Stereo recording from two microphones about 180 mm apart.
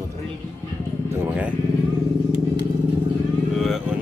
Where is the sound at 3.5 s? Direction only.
Centre (ahead or behind).